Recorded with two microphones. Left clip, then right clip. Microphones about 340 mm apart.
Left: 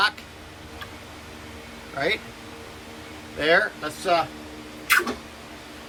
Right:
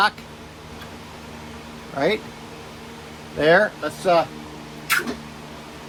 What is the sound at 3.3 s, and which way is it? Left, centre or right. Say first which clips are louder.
Speech: right 4 dB; centre.